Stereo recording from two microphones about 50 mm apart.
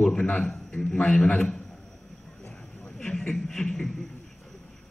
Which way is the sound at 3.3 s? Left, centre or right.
Centre.